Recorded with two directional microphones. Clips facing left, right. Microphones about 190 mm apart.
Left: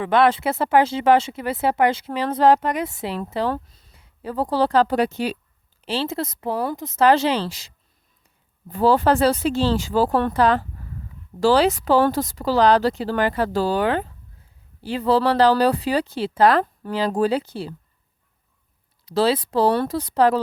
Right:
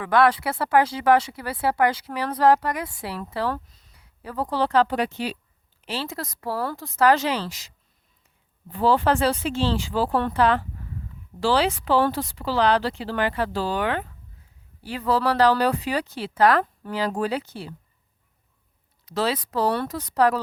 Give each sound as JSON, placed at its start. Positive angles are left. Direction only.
{"t": 0.0, "sound": "speech", "side_deg": 25}
{"t": 5.8, "sound": "speech", "side_deg": 30}
{"t": 8.7, "sound": "speech", "side_deg": 40}
{"t": 19.0, "sound": "speech", "side_deg": 30}